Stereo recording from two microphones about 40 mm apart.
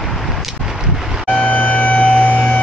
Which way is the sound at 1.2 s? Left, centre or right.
Left.